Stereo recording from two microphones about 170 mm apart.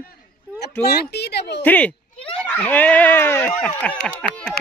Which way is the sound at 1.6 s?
10° left (ahead or behind).